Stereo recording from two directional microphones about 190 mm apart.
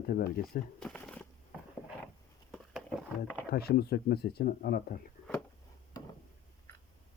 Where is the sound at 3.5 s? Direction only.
55° left (ahead or behind).